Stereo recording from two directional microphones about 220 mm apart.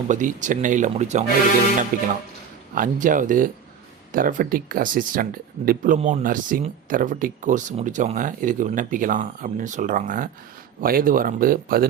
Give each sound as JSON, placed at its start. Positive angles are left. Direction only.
{"t": 0.1, "sound": "speech", "side_deg": -35}